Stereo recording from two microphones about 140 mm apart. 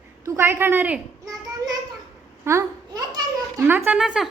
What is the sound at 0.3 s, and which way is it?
Speech, 15° right (ahead or behind).